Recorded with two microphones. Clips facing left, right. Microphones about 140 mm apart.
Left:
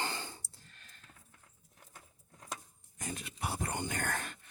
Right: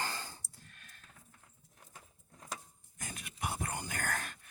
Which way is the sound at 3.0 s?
30° left (ahead or behind).